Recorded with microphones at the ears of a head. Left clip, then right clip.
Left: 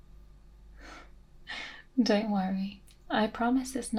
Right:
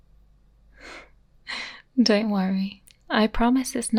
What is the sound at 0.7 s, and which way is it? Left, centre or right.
Speech, right.